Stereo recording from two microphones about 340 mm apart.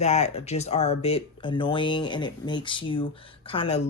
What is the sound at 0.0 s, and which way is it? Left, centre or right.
Speech, centre.